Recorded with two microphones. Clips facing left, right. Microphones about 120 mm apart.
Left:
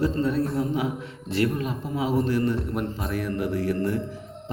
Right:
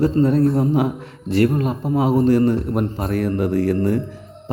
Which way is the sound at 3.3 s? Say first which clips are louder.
Right 6 dB; 40° right (ahead or behind).